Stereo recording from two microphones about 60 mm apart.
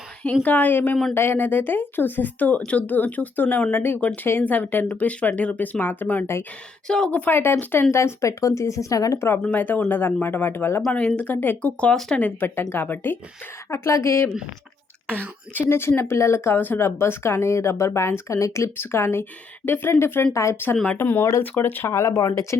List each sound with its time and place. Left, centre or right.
0.4 s a woman's voice: left
4.0 s a woman's voice: left
6.8 s a woman's voice: centre
7.1 s a woman's voice: left
9.1 s speech: left
9.4 s a woman's voice: left
10.9 s a woman's voice: left
12.4 s speech: left
13.7 s a woman's voice: left
15.7 s speech: left
18.8 s speech: left
20.3 s a woman's voice: left
21.0 s speech: left
22.0 s speech: left